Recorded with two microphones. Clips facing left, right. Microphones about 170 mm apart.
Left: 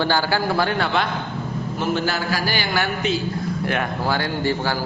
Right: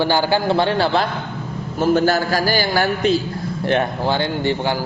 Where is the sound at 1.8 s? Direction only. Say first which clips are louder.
Right 8 dB; 45° right (ahead or behind).